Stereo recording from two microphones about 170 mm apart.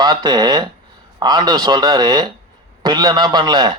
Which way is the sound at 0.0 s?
25° right (ahead or behind).